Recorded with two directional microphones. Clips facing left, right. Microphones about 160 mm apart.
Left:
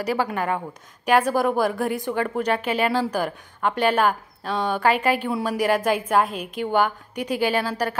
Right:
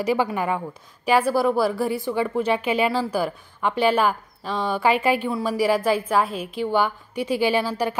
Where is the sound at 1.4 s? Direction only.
15° left (ahead or behind).